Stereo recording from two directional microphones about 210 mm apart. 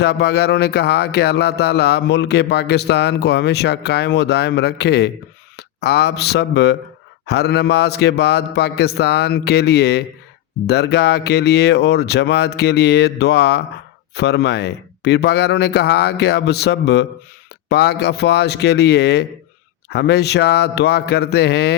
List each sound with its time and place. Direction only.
0.0 s speech: 50° left (ahead or behind)